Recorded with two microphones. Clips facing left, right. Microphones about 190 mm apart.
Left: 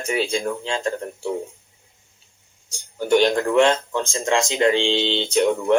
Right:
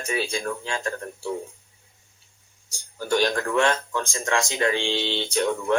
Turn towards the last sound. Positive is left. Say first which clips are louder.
# left 5 dB
turn(degrees=20)  # may be behind; listen again after turning